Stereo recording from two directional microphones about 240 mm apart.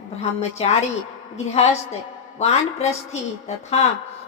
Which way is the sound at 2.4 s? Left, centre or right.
Left.